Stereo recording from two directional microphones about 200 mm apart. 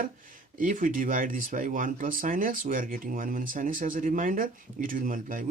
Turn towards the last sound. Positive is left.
turn(degrees=-45)  # may be behind; listen again after turning